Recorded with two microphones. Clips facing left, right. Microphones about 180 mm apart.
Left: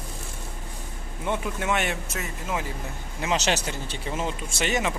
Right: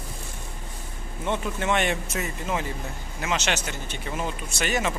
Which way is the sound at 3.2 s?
35° left (ahead or behind).